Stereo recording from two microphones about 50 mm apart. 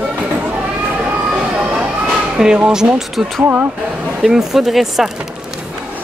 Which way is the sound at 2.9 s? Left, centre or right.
Centre.